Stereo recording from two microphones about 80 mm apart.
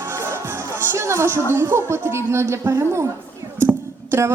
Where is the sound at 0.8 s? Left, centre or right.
Right.